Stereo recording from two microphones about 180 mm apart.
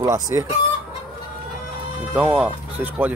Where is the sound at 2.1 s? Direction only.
5° right (ahead or behind).